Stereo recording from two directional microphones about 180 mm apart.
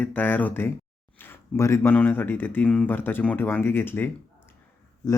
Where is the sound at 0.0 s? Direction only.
10° left (ahead or behind).